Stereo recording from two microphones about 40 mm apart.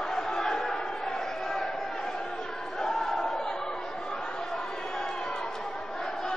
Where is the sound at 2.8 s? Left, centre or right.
Centre.